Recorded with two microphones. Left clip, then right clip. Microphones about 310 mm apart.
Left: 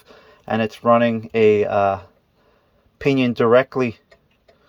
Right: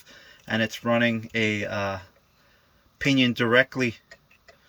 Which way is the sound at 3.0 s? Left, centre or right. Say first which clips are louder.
Left 5 dB; centre.